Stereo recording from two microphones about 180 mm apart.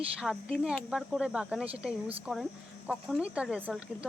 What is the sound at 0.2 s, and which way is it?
A woman's voice, centre (ahead or behind).